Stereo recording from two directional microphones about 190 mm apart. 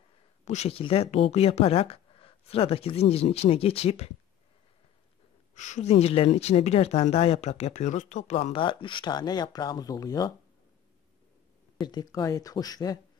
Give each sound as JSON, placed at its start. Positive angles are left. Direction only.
{"t": 0.5, "sound": "speech", "side_deg": 35}
{"t": 5.5, "sound": "speech", "side_deg": 40}
{"t": 11.8, "sound": "speech", "side_deg": 20}